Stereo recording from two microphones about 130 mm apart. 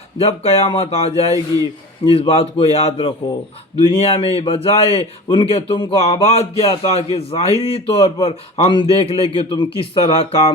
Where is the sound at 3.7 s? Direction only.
50° left (ahead or behind).